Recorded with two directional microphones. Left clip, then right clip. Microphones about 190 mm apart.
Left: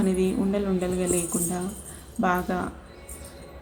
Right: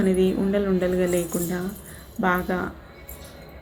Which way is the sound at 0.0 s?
5° left (ahead or behind).